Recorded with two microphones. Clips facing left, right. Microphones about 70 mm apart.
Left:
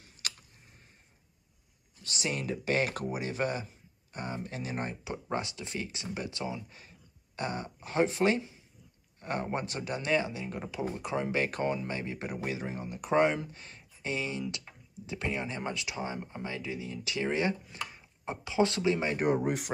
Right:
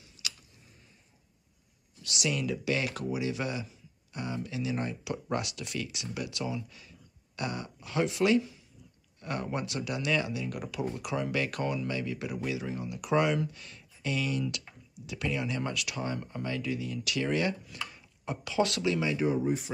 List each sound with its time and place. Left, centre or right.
0.2 s a sound: left
2.0 s speech: left
5.1 s speech: left
19.0 s speech: left